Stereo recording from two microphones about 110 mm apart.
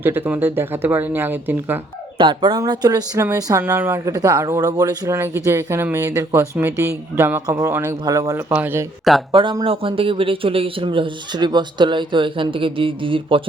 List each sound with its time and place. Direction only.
0.0 s speech: 20° right (ahead or behind)
2.1 s speech: 45° right (ahead or behind)
3.6 s speech: 20° right (ahead or behind)
5.1 s speech: 20° right (ahead or behind)
8.4 s speech: 15° right (ahead or behind)
9.3 s speech: 50° right (ahead or behind)